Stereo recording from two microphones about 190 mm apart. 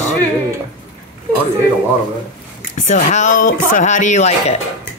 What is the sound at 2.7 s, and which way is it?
Speech, 40° left (ahead or behind).